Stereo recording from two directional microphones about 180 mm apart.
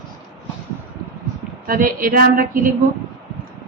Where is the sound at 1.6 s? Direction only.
50° right (ahead or behind).